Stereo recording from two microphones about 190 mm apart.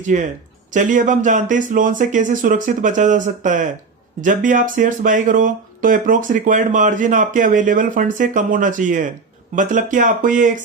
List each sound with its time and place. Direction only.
0.1 s speech: 45° right (ahead or behind)